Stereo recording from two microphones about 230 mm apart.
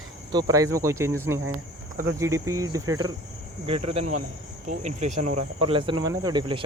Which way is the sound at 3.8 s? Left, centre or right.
Right.